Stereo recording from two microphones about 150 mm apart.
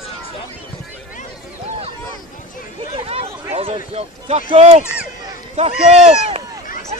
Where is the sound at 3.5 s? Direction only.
40° right (ahead or behind).